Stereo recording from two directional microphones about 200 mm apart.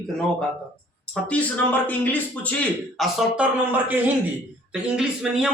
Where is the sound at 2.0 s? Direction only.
10° left (ahead or behind).